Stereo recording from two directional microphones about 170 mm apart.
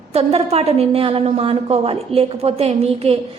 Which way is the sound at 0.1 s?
35° right (ahead or behind).